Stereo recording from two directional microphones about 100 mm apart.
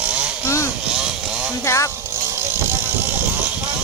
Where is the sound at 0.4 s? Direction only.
30° left (ahead or behind).